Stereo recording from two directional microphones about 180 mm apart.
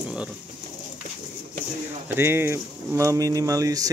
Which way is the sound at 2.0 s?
15° right (ahead or behind).